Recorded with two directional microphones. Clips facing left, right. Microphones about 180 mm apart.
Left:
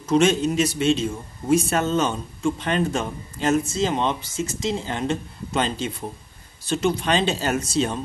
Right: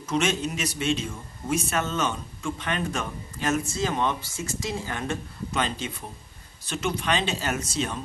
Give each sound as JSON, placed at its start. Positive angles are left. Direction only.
{"t": 0.0, "sound": "a man's voice", "side_deg": 35}